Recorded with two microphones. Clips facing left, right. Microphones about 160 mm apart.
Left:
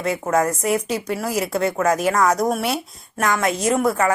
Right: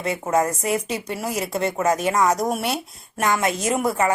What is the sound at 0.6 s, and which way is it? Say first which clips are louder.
Speech: left 3 dB; centre (ahead or behind).